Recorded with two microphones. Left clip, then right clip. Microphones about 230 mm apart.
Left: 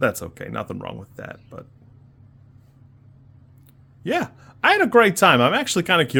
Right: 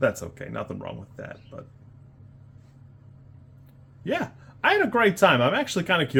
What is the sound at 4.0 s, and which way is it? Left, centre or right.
Speech, left.